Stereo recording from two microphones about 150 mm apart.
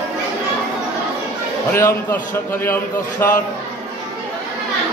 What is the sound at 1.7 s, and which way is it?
Speech, 15° left (ahead or behind).